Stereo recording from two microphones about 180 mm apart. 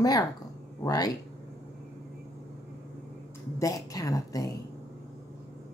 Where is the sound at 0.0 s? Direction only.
20° left (ahead or behind).